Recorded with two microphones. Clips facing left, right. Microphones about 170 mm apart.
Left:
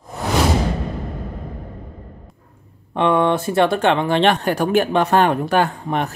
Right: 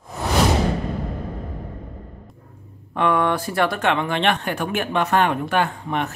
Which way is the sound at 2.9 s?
25° left (ahead or behind).